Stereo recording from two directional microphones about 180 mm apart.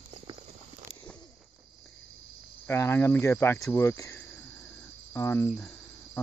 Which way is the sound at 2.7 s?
15° left (ahead or behind).